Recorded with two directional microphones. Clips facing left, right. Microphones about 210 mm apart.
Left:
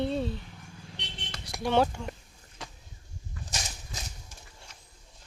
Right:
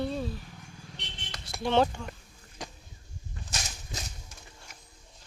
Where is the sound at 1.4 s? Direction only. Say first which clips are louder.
Even; 15° left (ahead or behind).